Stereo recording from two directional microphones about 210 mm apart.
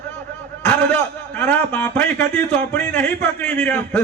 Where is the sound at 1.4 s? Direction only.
10° left (ahead or behind).